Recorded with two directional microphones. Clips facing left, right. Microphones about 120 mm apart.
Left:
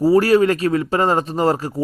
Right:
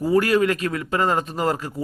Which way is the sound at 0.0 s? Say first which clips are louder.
Left 5 dB; 35° left (ahead or behind).